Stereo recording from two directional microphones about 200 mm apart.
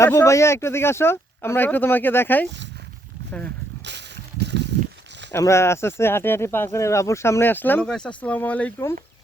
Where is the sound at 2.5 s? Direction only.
60° right (ahead or behind).